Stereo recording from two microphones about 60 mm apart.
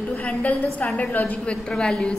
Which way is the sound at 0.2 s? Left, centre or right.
Left.